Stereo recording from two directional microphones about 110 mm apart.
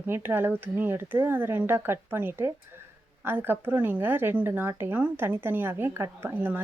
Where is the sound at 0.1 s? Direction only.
20° right (ahead or behind).